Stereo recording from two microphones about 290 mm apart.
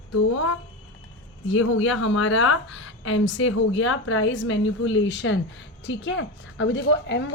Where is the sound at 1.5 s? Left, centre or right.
Left.